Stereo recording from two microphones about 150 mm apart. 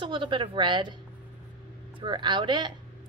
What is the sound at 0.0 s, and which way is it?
Speech, 35° right (ahead or behind).